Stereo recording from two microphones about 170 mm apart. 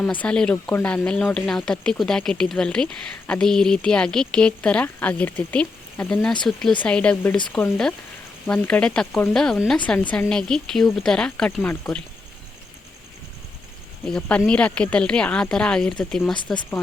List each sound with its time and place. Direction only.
0.0 s speech: 5° left (ahead or behind)
14.1 s speech: 5° left (ahead or behind)